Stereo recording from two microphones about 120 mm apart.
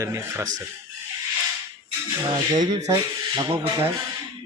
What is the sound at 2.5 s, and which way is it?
Speech, 35° right (ahead or behind).